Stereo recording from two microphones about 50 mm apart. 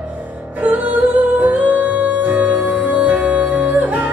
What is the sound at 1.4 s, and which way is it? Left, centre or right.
Music, right.